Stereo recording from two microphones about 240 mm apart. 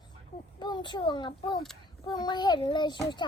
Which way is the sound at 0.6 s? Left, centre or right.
Centre.